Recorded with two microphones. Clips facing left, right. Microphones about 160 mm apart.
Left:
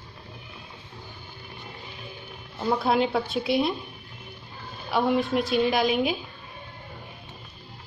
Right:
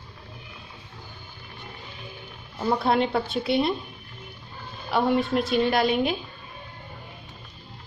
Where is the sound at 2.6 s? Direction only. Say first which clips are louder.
Right 1 dB; centre (ahead or behind).